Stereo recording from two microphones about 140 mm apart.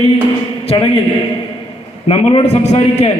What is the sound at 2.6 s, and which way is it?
Speech, 55° left (ahead or behind).